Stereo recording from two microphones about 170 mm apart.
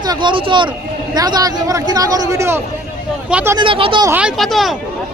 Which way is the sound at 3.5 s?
30° right (ahead or behind).